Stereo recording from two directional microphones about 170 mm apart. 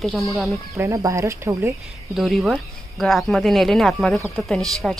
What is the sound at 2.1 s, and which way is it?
Speech, centre (ahead or behind).